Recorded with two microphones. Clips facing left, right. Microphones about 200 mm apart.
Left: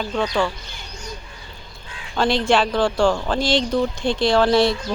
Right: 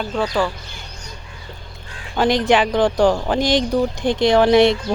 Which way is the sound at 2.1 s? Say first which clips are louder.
Right 2 dB; 15° right (ahead or behind).